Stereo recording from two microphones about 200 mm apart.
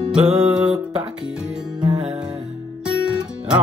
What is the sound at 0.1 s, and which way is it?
Music, 5° right (ahead or behind).